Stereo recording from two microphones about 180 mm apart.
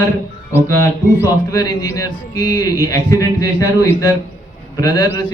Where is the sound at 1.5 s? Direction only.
20° left (ahead or behind).